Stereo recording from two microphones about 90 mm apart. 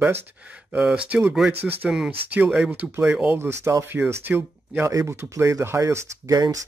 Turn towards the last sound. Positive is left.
turn(degrees=-45)  # may be behind; listen again after turning